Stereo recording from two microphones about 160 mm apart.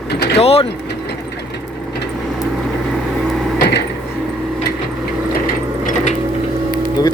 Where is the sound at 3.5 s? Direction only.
90° left.